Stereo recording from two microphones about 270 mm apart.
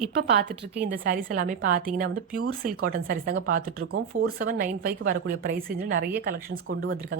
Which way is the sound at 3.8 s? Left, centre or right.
Right.